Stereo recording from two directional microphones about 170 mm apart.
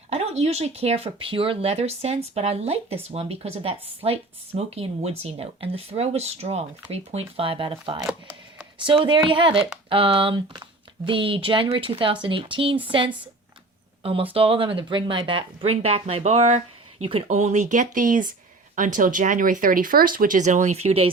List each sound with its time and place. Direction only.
0.1 s speech: 35° right (ahead or behind)